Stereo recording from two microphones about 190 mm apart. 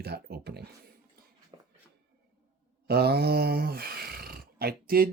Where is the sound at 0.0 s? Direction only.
55° right (ahead or behind).